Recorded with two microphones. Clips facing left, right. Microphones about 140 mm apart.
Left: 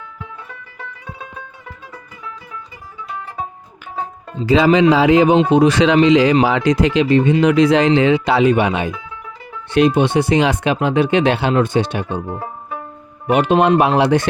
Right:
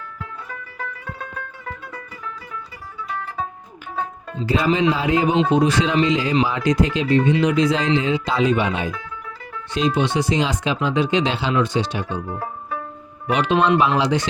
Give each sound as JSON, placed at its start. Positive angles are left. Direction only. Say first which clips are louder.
{"t": 4.4, "sound": "speech", "louder": "left 7 dB", "side_deg": 90}
{"t": 5.5, "sound": "speech", "louder": "left 6 dB", "side_deg": 70}
{"t": 13.2, "sound": "speech", "louder": "left 5 dB", "side_deg": 50}